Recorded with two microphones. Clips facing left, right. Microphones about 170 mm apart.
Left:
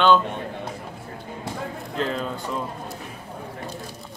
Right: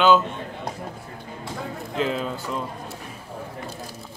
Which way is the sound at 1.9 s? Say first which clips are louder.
Right 2 dB; 5° right (ahead or behind).